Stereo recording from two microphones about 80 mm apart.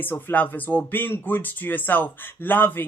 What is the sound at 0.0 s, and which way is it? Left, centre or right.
Speech, left.